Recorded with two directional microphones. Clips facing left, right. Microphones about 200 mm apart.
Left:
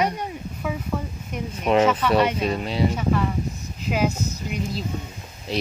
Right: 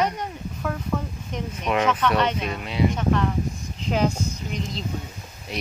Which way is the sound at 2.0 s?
10° left (ahead or behind).